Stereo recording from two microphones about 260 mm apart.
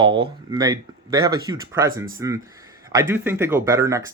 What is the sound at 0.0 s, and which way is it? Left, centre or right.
Speech, centre.